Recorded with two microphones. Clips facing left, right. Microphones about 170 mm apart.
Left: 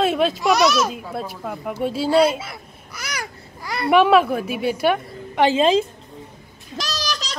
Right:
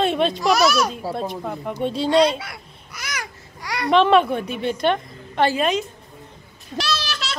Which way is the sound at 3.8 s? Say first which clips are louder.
Left 1 dB; 10° left (ahead or behind).